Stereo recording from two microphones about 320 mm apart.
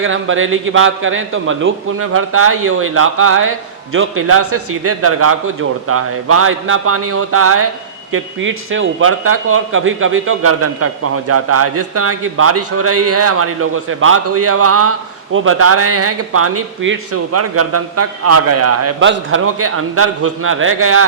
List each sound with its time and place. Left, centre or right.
0.0 s a man's voice: right